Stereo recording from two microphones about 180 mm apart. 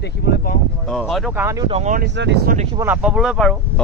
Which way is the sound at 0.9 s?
Centre (ahead or behind).